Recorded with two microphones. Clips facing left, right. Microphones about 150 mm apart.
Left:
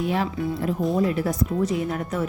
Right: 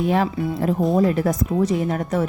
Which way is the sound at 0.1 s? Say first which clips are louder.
Right 4 dB; 45° right (ahead or behind).